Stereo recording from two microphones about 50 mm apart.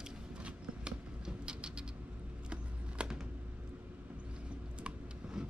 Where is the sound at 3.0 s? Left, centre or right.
Right.